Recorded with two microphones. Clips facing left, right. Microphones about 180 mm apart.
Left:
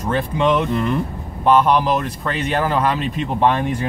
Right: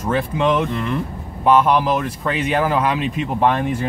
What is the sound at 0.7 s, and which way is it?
Speech, 40° left (ahead or behind).